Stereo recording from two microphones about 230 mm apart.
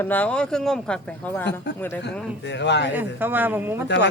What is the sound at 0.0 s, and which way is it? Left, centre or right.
Speech, centre.